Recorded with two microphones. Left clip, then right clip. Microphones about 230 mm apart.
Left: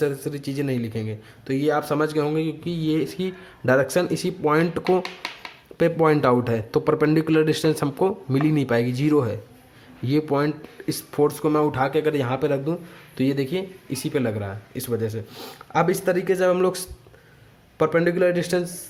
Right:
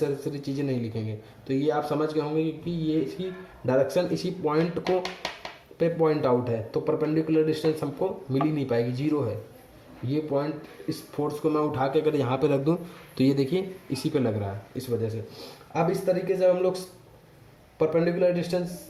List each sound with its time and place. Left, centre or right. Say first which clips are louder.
0.0 s speech: left 4 dB; left
14.8 s speech: left 3 dB; left
15.7 s speech: left 4 dB; left